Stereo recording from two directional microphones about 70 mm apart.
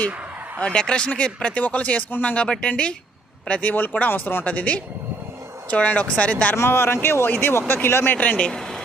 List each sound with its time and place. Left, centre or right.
0.6 s speech: centre
2.3 s speech: centre
6.6 s speech: left
8.4 s speech: centre